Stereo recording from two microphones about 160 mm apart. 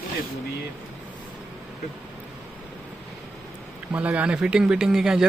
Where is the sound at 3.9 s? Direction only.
10° right (ahead or behind).